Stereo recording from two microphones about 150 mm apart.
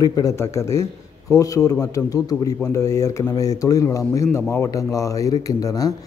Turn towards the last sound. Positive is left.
turn(degrees=25)  # may be behind; listen again after turning